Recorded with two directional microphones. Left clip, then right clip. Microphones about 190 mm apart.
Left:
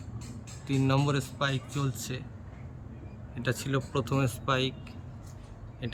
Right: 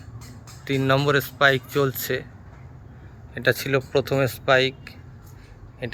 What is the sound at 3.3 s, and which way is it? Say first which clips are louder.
Speech: right 11 dB; 45° right (ahead or behind).